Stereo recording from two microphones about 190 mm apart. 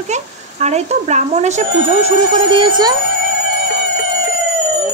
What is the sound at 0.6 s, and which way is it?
Speech, 35° right (ahead or behind).